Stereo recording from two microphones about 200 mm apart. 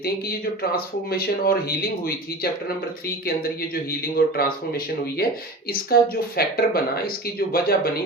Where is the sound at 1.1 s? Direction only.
50° left (ahead or behind).